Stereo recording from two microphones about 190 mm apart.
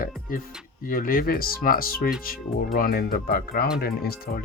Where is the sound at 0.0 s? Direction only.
50° left (ahead or behind).